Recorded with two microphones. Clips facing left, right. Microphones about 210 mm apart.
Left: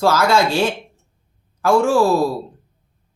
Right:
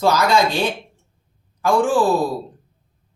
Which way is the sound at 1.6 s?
15° right (ahead or behind).